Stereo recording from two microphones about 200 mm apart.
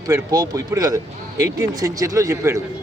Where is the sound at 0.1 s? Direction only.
15° right (ahead or behind).